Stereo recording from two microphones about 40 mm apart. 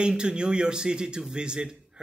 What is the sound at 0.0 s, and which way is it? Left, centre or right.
A man's voice, right.